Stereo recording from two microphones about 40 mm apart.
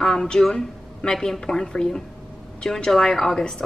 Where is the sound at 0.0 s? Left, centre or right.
Centre.